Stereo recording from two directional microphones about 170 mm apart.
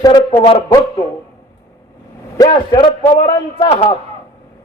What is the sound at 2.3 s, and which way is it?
A man's voice, 20° left (ahead or behind).